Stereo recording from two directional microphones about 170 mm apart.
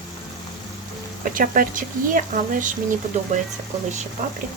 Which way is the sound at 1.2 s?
55° right (ahead or behind).